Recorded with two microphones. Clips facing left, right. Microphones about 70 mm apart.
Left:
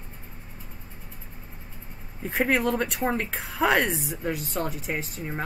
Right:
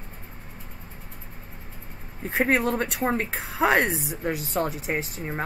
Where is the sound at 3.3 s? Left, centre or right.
Centre.